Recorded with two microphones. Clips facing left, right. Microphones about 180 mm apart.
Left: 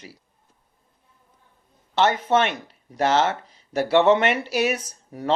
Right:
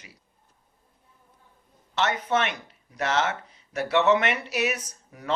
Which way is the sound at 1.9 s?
30° left (ahead or behind).